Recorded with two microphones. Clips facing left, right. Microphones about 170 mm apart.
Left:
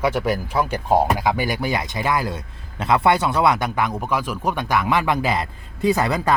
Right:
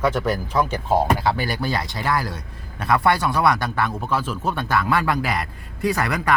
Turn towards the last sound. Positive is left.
turn(degrees=25)  # may be behind; listen again after turning